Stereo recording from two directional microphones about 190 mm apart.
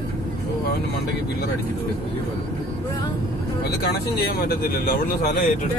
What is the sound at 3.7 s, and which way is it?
Speech, 55° left (ahead or behind).